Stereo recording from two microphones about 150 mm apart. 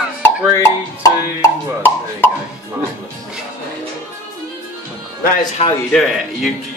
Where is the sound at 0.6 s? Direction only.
20° left (ahead or behind).